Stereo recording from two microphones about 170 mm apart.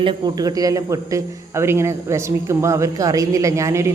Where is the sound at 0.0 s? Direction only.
25° right (ahead or behind).